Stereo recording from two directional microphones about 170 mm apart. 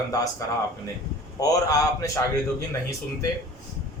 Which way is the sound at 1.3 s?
20° left (ahead or behind).